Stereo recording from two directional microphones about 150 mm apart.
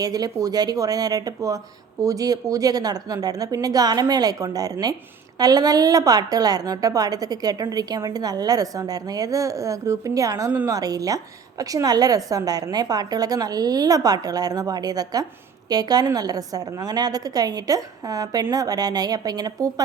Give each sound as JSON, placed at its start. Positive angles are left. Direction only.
{"t": 0.0, "sound": "a woman's voice", "side_deg": -25}